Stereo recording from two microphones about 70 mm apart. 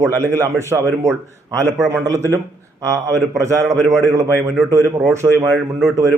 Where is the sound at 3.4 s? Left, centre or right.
Right.